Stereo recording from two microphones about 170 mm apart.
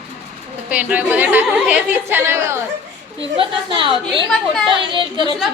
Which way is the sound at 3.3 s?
30° right (ahead or behind).